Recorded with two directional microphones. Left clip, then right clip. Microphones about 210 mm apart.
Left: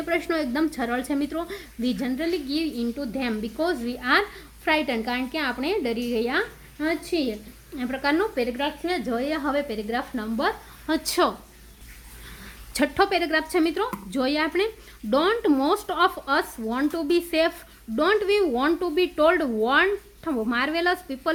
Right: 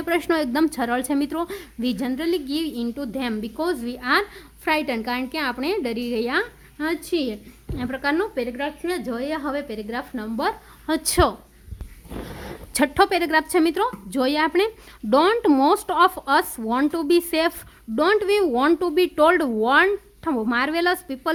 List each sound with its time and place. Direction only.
0.0 s a woman's voice: 45° right (ahead or behind)
7.8 s a woman's voice: 35° right (ahead or behind)
12.7 s a woman's voice: 35° right (ahead or behind)